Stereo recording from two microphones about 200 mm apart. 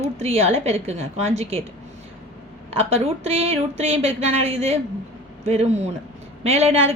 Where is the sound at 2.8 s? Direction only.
30° right (ahead or behind).